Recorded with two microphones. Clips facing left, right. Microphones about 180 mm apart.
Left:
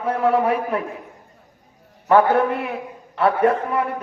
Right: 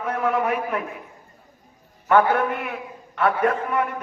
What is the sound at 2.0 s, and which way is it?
A man's voice, 30° left (ahead or behind).